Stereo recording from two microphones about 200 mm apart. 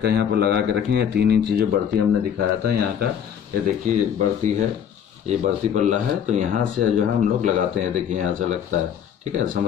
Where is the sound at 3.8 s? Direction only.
40° right (ahead or behind).